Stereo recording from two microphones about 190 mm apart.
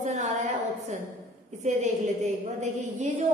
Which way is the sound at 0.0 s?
40° right (ahead or behind).